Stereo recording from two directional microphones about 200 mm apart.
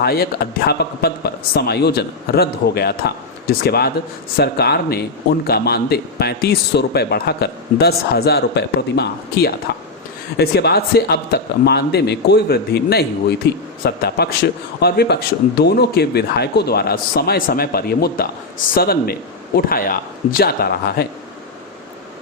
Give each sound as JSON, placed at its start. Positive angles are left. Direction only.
{"t": 0.0, "sound": "a man's voice", "side_deg": 50}